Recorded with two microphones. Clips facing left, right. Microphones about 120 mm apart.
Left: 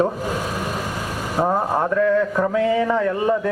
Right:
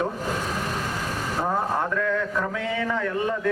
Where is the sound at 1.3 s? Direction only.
35° left (ahead or behind).